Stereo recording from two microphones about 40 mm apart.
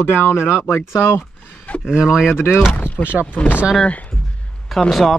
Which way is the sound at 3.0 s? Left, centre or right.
Right.